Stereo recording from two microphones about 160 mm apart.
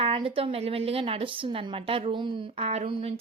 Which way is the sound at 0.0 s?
35° right (ahead or behind).